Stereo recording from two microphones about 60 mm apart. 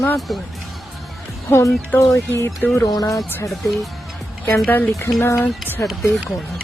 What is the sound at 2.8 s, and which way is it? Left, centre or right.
Speech, left.